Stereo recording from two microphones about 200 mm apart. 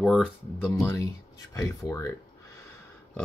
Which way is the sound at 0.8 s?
15° left (ahead or behind).